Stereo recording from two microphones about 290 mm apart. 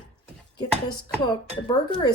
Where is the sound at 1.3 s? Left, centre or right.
Centre.